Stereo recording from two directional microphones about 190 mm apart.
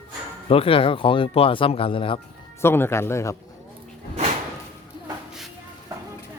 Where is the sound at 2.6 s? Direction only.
10° left (ahead or behind).